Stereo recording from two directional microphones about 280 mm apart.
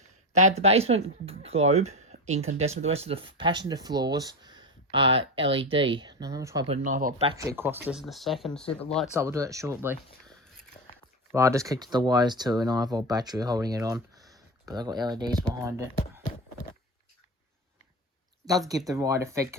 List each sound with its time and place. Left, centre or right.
0.3 s speech: right
6.8 s speech: right
7.3 s speech: centre
9.1 s speech: centre
18.9 s speech: centre